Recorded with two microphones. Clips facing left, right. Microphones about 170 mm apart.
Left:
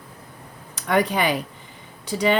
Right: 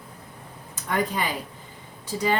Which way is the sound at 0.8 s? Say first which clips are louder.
Left 6 dB; 85° left.